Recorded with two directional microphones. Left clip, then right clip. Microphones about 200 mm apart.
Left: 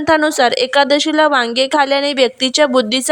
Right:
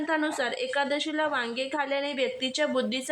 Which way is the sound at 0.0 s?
40° left (ahead or behind).